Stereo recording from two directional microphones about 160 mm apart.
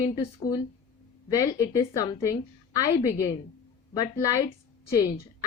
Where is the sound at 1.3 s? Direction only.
20° left (ahead or behind).